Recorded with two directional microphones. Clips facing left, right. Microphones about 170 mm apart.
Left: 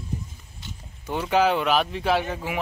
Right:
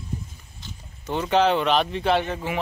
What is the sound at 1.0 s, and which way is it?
Speech, 5° left (ahead or behind).